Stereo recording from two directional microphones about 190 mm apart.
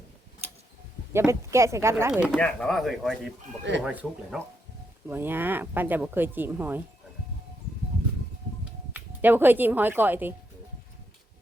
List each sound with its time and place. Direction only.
1.1 s speech: 15° right (ahead or behind)
2.3 s speech: 5° left (ahead or behind)
3.6 s speech: 70° right (ahead or behind)
3.8 s speech: 5° right (ahead or behind)
8.9 s speech: 10° right (ahead or behind)